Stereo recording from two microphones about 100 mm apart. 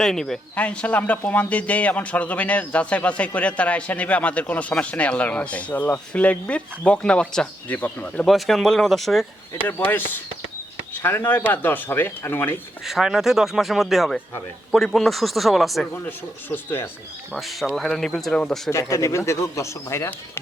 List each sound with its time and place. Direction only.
0.0 s a man's voice: 5° left (ahead or behind)
8.3 s speech: centre (ahead or behind)
9.6 s speech: 20° left (ahead or behind)
12.8 s speech: 5° right (ahead or behind)
16.0 s speech: 20° left (ahead or behind)
17.3 s speech: centre (ahead or behind)
18.7 s speech: 30° left (ahead or behind)